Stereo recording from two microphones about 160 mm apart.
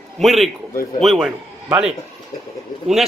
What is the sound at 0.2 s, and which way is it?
A man's voice, centre (ahead or behind).